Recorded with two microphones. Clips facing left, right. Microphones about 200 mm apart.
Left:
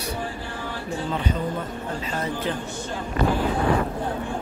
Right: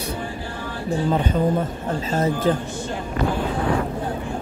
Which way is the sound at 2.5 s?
40° right (ahead or behind).